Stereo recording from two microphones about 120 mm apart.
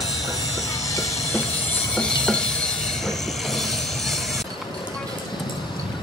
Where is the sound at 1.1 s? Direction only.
60° left (ahead or behind).